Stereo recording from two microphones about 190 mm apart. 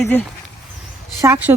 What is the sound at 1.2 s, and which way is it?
Speech, 10° right (ahead or behind).